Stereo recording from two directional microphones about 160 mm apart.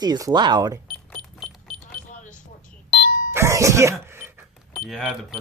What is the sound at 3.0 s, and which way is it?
Doorbell, 60° left (ahead or behind).